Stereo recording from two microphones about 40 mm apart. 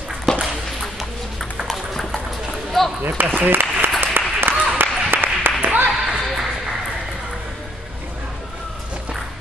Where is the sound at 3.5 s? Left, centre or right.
Right.